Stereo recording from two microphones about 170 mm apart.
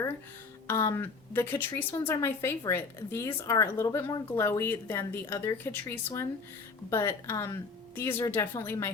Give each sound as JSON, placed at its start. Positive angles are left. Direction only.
{"t": 0.7, "sound": "a woman's voice", "side_deg": 15}